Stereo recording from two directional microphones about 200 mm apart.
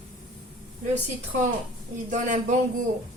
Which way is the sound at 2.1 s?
40° right (ahead or behind).